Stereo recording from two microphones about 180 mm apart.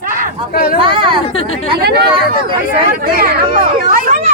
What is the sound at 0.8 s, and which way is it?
Speech, 30° right (ahead or behind).